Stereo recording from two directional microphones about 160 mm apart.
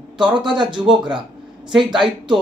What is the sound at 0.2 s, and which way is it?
Speech, 30° right (ahead or behind).